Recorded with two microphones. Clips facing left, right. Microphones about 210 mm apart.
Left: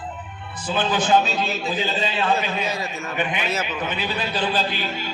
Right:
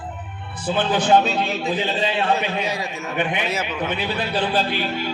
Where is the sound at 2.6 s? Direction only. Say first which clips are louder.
Right 1 dB; 15° right (ahead or behind).